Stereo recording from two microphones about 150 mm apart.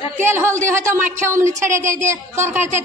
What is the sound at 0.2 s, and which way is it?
A man's voice, 15° right (ahead or behind).